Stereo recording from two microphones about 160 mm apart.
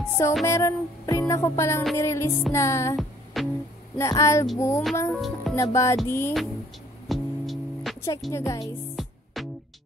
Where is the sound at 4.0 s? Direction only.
20° left (ahead or behind).